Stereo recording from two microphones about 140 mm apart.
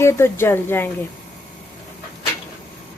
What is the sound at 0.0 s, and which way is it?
Speech, 20° left (ahead or behind).